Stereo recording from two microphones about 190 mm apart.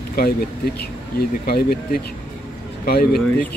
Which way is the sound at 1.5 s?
55° left (ahead or behind).